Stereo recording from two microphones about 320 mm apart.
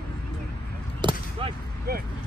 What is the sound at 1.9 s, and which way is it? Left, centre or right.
Vehicle, right.